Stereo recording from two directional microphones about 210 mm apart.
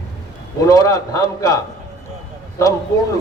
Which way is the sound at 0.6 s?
15° left (ahead or behind).